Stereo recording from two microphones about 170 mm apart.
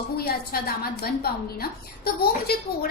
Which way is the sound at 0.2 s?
65° left (ahead or behind).